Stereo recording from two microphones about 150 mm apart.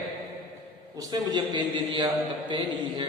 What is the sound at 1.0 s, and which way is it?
A man's voice, 25° right (ahead or behind).